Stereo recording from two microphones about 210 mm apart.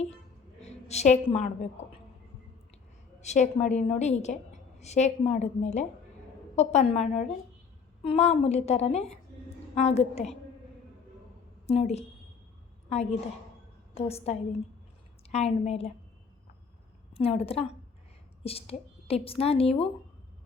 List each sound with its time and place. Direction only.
0.6 s a woman's voice: 30° left (ahead or behind)
3.2 s a woman's voice: 35° left (ahead or behind)
11.6 s a woman's voice: 30° left (ahead or behind)
17.2 s a woman's voice: 30° left (ahead or behind)